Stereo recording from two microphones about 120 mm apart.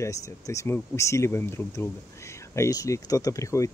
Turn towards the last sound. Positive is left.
turn(degrees=25)  # may be behind; listen again after turning